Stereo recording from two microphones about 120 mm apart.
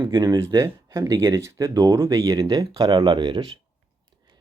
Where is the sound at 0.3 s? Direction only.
25° right (ahead or behind); by 3.5 s 40° right (ahead or behind).